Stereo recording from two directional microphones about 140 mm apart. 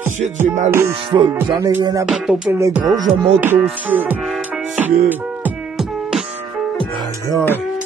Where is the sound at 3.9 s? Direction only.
10° right (ahead or behind).